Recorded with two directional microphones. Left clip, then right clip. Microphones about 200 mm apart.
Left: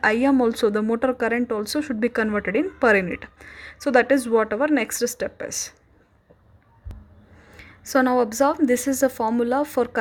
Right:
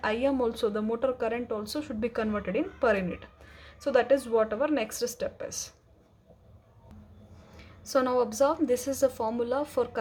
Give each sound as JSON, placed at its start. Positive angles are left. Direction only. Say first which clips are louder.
{"t": 0.0, "sound": "a woman's voice", "louder": "left 8 dB", "side_deg": 30}
{"t": 7.9, "sound": "a woman's voice", "louder": "left 6 dB", "side_deg": 25}